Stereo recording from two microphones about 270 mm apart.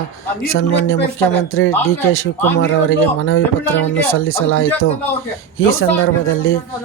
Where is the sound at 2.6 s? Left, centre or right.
Left.